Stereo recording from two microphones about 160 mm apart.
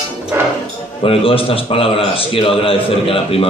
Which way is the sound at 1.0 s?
35° left (ahead or behind).